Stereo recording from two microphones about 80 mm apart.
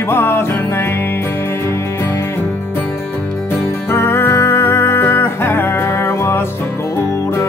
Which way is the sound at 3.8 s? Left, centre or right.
Left.